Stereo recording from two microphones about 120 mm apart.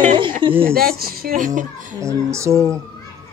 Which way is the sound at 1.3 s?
90° right.